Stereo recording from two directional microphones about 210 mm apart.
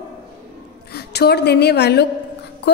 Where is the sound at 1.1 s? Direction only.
50° left (ahead or behind).